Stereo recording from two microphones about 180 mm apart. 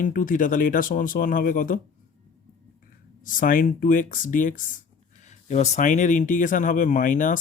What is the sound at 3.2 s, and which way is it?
Speech, 50° left (ahead or behind).